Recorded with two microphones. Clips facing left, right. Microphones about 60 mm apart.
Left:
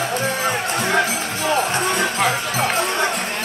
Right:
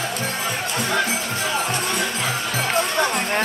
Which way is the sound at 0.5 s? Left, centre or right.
Left.